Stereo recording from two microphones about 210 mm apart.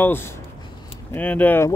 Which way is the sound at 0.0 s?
10° left (ahead or behind).